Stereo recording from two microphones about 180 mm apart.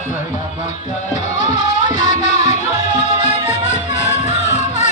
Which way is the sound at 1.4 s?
40° left (ahead or behind).